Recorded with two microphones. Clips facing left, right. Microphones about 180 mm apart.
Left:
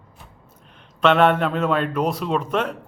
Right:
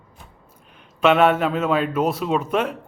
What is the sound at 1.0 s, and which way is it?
A man's voice, 5° right (ahead or behind).